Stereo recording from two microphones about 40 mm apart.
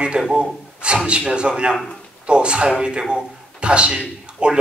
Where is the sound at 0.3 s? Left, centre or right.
Right.